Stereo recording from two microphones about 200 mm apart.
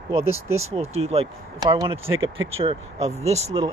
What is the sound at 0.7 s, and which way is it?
Speech, 30° right (ahead or behind).